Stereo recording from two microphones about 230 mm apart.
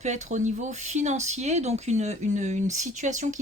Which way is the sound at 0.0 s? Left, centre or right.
Right.